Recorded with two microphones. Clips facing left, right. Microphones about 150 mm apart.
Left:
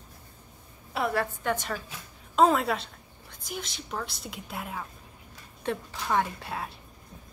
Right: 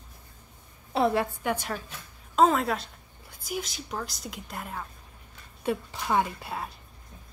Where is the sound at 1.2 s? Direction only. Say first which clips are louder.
Right 1 dB; 10° right (ahead or behind).